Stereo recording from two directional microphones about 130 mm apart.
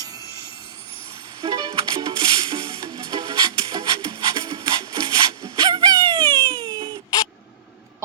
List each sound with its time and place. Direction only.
0.0 s vehicle: 30° right (ahead or behind)
1.4 s music: 35° right (ahead or behind)